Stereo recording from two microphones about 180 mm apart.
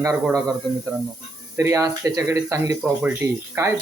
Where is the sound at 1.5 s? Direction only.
15° right (ahead or behind).